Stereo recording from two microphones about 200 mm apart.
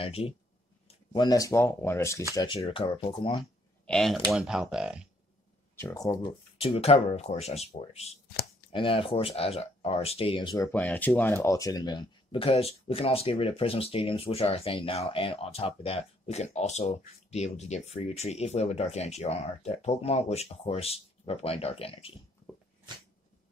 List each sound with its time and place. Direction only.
0.0 s speech: 30° left (ahead or behind); by 2.2 s 15° left (ahead or behind)
2.3 s speech: 25° left (ahead or behind)
3.8 s speech: centre (ahead or behind)
5.8 s speech: 15° left (ahead or behind)
6.6 s speech: 30° left (ahead or behind)
10.7 s speech: 10° left (ahead or behind); by 22.1 s 30° left (ahead or behind)